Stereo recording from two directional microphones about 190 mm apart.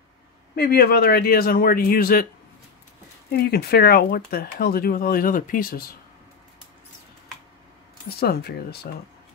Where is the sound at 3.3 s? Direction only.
55° left (ahead or behind).